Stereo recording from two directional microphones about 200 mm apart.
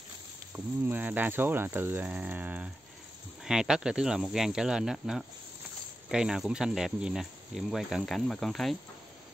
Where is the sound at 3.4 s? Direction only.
5° right (ahead or behind).